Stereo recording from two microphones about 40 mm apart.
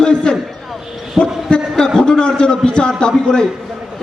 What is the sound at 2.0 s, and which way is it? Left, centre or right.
Speech, centre.